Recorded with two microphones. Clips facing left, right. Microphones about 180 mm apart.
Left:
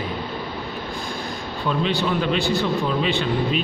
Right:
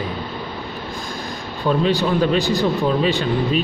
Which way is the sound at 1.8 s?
45° right (ahead or behind).